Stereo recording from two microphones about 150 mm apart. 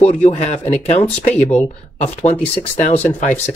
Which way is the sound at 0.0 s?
50° left (ahead or behind).